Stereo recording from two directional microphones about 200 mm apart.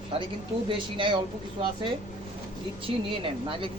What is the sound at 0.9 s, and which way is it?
Speech, 25° right (ahead or behind).